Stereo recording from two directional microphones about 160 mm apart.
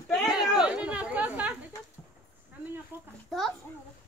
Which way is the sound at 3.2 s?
Centre (ahead or behind).